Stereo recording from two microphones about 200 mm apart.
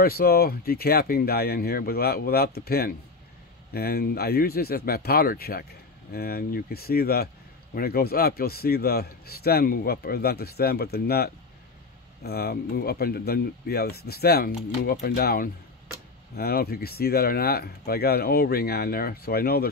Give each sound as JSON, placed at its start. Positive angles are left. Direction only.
{"t": 0.0, "sound": "a man's voice", "side_deg": 50}